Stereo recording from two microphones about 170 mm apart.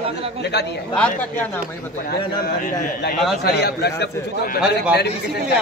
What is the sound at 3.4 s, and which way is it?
A man's voice, 75° left (ahead or behind).